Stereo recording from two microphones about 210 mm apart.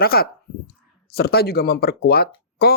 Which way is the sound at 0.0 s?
45° left (ahead or behind).